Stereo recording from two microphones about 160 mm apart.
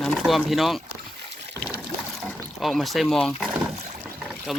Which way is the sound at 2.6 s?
Centre (ahead or behind).